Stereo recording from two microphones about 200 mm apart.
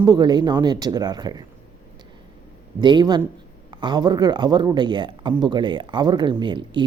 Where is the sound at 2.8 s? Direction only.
20° right (ahead or behind).